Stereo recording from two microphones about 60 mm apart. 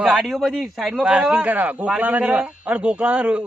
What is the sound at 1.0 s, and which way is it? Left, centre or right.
Speech, centre.